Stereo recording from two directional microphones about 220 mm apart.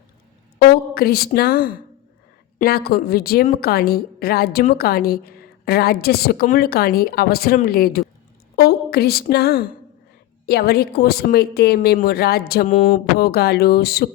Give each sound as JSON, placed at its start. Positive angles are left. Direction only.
{"t": 0.6, "sound": "a woman's voice", "side_deg": 45}
{"t": 8.5, "sound": "a sound", "side_deg": 45}
{"t": 9.3, "sound": "a woman's voice", "side_deg": 45}